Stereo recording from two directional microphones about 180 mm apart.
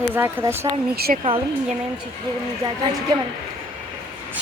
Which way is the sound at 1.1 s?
45° right (ahead or behind).